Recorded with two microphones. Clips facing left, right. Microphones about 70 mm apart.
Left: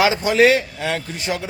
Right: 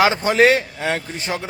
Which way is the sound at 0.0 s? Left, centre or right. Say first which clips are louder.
Even; right.